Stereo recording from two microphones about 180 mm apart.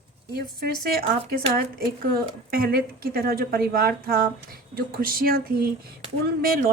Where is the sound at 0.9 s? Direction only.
55° right (ahead or behind).